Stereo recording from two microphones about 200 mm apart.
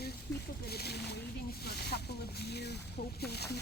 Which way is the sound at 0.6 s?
50° left (ahead or behind).